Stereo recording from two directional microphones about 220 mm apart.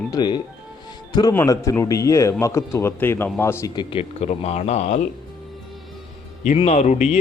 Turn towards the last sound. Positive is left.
turn(degrees=30)  # may be behind; listen again after turning